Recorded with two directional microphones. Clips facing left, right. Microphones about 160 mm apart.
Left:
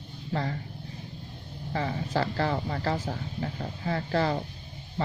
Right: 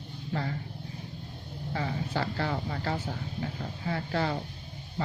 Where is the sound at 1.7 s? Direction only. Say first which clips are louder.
Left 3 dB; 35° left (ahead or behind).